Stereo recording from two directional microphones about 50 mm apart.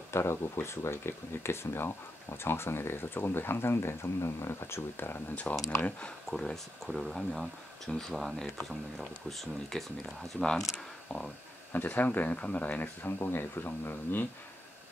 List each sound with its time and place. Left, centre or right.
0.1 s speech: left
5.3 s speech: left; by 9.8 s centre
11.7 s speech: left
13.2 s speech: left